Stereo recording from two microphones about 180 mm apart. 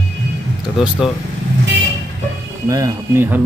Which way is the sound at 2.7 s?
20° right (ahead or behind).